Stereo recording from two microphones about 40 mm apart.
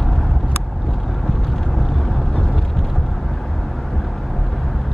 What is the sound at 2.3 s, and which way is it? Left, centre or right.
Vehicle, centre.